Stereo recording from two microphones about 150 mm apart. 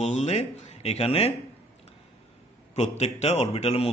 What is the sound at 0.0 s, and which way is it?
Speech, 45° left (ahead or behind).